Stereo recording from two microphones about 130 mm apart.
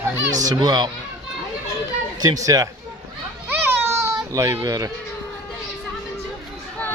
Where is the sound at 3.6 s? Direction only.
20° right (ahead or behind).